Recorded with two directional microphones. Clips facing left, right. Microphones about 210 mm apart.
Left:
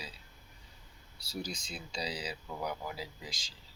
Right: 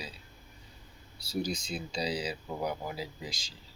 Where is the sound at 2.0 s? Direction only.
25° right (ahead or behind).